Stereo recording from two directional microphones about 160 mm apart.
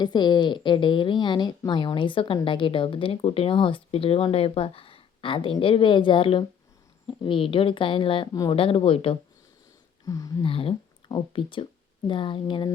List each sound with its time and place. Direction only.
0.0 s a woman's voice: 30° left (ahead or behind)
10.1 s speech: 20° left (ahead or behind)
10.4 s speech: 35° left (ahead or behind)